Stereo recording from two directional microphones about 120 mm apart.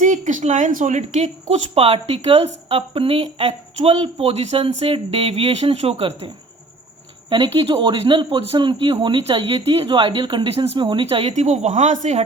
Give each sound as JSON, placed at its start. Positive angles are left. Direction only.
{"t": 0.0, "sound": "speech", "side_deg": -90}
{"t": 11.3, "sound": "a woman's voice", "side_deg": -75}